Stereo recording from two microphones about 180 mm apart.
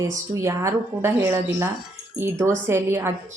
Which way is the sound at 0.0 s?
15° right (ahead or behind).